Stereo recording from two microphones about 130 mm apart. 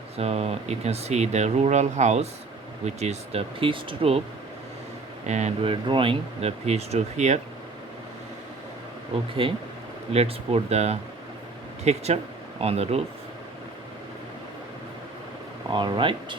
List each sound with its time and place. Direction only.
0.2 s speech: 55° right (ahead or behind)
5.2 s speech: 60° right (ahead or behind)
5.6 s speech: 40° right (ahead or behind); by 7.3 s 60° right (ahead or behind)
9.1 s speech: 45° right (ahead or behind)
15.7 s speech: 40° right (ahead or behind)